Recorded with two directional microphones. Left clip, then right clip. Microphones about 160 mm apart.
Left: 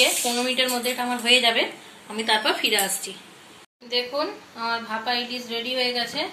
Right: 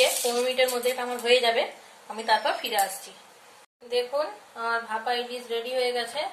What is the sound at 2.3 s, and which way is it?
Speech, 45° right (ahead or behind).